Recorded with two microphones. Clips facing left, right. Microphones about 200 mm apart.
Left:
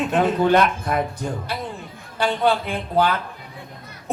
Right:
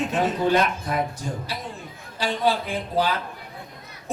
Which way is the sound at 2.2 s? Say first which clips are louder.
Left 3 dB; 55° left (ahead or behind).